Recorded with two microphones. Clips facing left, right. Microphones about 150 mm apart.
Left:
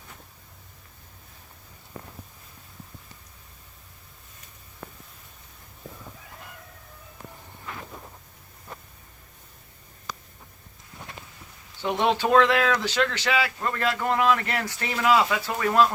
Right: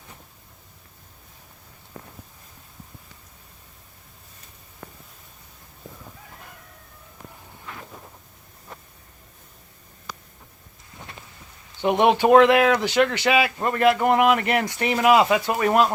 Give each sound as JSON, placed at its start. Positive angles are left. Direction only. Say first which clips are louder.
{"t": 11.8, "sound": "speech", "louder": "right 6 dB", "side_deg": -15}